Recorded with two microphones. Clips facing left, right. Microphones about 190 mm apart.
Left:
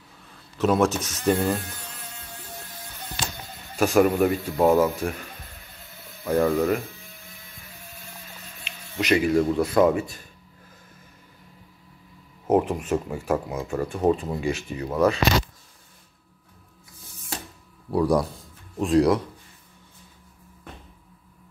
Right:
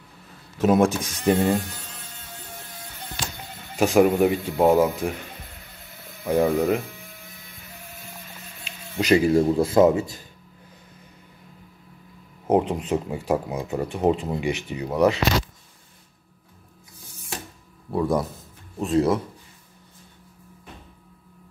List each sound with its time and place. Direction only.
0.6 s speech: 15° right (ahead or behind)
3.7 s speech: 15° right (ahead or behind)
6.2 s speech: 10° right (ahead or behind)
8.9 s speech: 30° right (ahead or behind)
12.4 s speech: 20° right (ahead or behind)
17.9 s speech: centre (ahead or behind)